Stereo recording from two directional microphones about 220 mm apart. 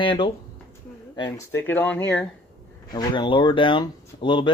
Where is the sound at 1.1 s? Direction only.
10° left (ahead or behind).